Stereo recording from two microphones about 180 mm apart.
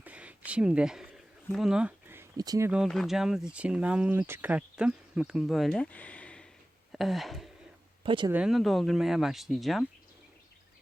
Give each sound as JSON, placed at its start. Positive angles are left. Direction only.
{"t": 0.0, "sound": "a sound", "side_deg": -5}
{"t": 2.6, "sound": "speech", "side_deg": 0}
{"t": 8.0, "sound": "speech", "side_deg": -25}
{"t": 8.3, "sound": "speech", "side_deg": -5}